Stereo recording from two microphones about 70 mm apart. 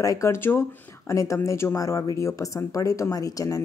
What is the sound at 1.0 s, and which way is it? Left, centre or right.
Speech, left.